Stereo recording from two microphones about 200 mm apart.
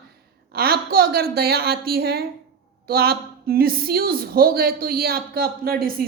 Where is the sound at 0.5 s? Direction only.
50° right (ahead or behind).